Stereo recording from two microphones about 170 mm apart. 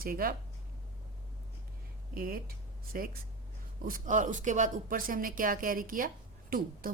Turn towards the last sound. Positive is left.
turn(degrees=-55)  # may be behind; listen again after turning